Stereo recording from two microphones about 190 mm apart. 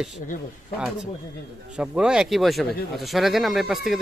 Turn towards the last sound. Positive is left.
turn(degrees=0)  # may be behind; listen again after turning